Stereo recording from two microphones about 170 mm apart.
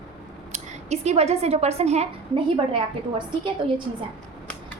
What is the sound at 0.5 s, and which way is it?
Speech, 40° right (ahead or behind).